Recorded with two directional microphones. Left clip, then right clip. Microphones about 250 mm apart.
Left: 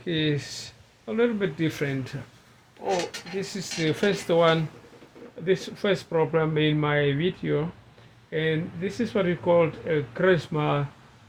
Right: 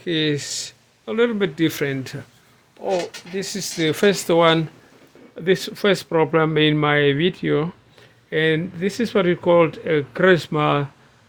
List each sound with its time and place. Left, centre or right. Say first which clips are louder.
0.0 s speech: right 5 dB; right
3.3 s speech: right 7 dB; right